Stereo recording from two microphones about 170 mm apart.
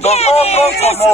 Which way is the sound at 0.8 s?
40° left (ahead or behind).